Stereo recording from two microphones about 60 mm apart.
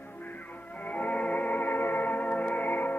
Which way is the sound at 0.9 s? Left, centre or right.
Left.